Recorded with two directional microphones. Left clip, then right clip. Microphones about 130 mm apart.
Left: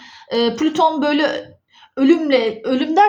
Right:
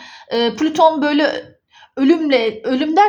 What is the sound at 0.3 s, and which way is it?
A woman's voice, 40° right (ahead or behind).